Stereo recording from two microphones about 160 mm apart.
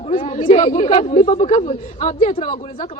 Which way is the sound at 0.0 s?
35° left (ahead or behind).